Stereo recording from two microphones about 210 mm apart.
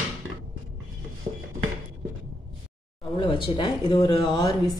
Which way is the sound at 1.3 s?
40° right (ahead or behind).